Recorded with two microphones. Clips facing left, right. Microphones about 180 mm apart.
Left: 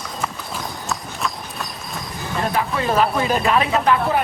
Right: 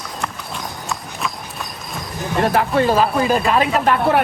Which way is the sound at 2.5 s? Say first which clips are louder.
Right 6 dB; 60° right (ahead or behind).